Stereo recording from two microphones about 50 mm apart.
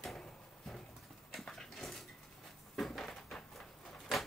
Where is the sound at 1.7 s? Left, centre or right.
Centre.